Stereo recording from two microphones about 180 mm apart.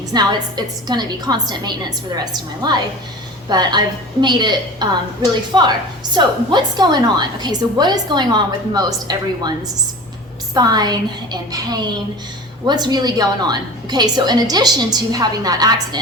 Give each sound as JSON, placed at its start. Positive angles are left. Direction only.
{"t": 0.1, "sound": "a woman's voice", "side_deg": -25}
{"t": 10.5, "sound": "a woman's voice", "side_deg": -20}